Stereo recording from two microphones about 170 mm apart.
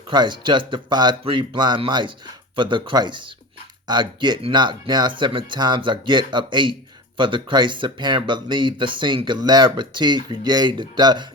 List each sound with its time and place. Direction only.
0.1 s speech: 25° right (ahead or behind)